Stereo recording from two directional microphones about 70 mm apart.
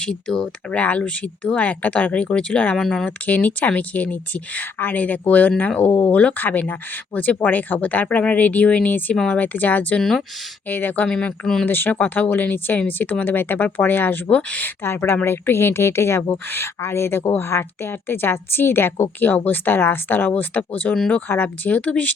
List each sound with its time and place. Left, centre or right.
0.0 s speech: centre
3.2 s a woman's voice: left
9.1 s speech: centre
9.4 s a woman's voice: left
10.0 s speech: centre
10.7 s a woman's voice: left
11.1 s speech: centre
11.6 s a woman's voice: left
14.8 s a woman's voice: left; by 22.1 s centre